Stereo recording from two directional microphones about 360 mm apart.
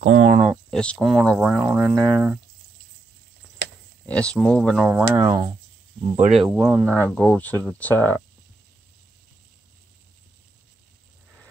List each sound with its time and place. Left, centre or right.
0.0 s speech: right
0.5 s speech: centre
4.0 s speech: centre